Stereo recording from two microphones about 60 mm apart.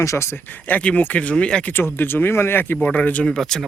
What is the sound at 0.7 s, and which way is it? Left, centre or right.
Speech, left.